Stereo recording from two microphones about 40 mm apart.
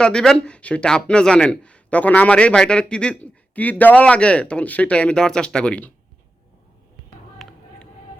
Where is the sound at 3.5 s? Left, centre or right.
Left.